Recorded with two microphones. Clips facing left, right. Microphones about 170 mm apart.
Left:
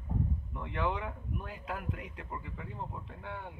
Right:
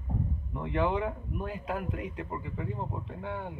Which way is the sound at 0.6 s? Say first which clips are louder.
Right 6 dB; 25° right (ahead or behind).